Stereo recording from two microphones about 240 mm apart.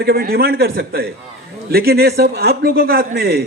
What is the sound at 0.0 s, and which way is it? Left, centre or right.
A man's voice, right.